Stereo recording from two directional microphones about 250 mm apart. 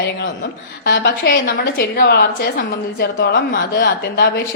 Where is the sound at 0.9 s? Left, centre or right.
Left.